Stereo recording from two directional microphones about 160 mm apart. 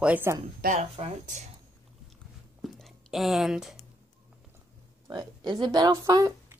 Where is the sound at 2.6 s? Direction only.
Centre (ahead or behind).